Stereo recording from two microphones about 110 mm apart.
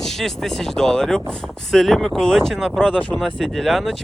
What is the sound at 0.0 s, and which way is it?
Speech, 5° left (ahead or behind).